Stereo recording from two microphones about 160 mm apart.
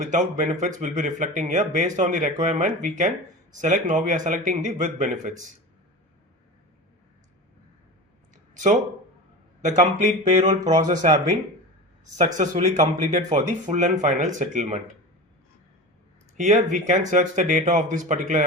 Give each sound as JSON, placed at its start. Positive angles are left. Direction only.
{"t": 0.1, "sound": "speech", "side_deg": -50}
{"t": 9.6, "sound": "speech", "side_deg": -50}
{"t": 12.1, "sound": "speech", "side_deg": -45}
{"t": 16.4, "sound": "speech", "side_deg": -50}